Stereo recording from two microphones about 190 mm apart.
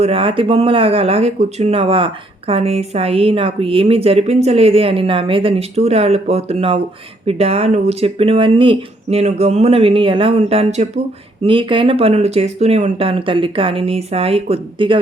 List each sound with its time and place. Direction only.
0.0 s speech: 30° right (ahead or behind)